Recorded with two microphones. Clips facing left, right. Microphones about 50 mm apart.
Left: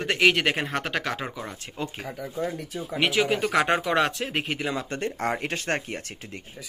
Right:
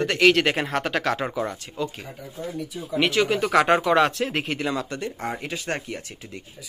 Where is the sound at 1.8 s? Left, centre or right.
Left.